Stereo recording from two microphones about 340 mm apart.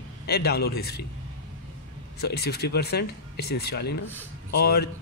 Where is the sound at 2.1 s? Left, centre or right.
Left.